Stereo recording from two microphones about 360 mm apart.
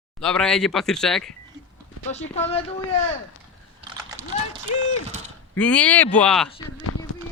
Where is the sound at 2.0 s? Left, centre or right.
Centre.